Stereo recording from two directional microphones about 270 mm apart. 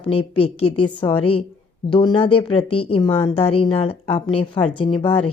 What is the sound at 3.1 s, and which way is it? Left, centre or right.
Speech, centre.